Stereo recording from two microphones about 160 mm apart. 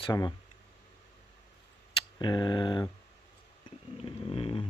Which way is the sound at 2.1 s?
25° left (ahead or behind).